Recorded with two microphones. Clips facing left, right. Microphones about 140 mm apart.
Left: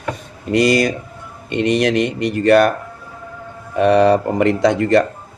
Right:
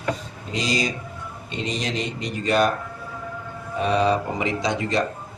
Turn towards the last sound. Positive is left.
turn(degrees=55)  # may be behind; listen again after turning